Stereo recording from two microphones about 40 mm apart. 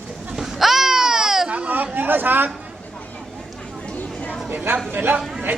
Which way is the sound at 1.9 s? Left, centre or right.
Right.